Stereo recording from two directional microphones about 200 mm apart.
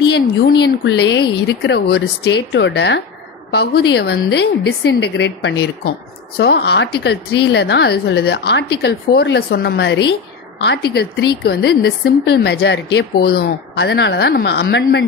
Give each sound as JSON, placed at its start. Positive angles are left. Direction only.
{"t": 0.6, "sound": "a woman's voice", "side_deg": 55}